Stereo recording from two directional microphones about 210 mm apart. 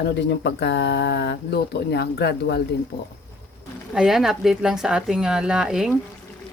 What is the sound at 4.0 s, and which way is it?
Speech, centre (ahead or behind).